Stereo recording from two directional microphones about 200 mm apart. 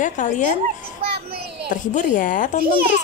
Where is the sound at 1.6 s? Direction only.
40° left (ahead or behind).